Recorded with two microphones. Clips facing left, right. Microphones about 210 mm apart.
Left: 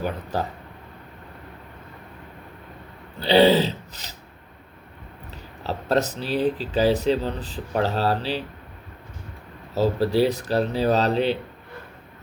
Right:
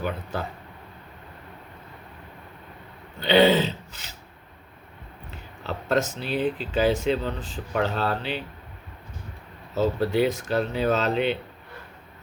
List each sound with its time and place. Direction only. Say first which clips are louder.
0.0 s speech: left 3 dB; 40° left (ahead or behind)
3.2 s speech: left 2 dB; 35° left (ahead or behind)
5.3 s speech: left 3 dB; 35° left (ahead or behind)
9.7 s speech: left 2 dB; 35° left (ahead or behind)